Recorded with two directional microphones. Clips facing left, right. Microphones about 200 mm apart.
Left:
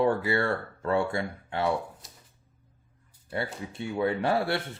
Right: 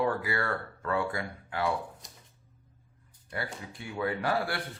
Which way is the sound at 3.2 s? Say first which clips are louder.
Left 5 dB; 25° left (ahead or behind).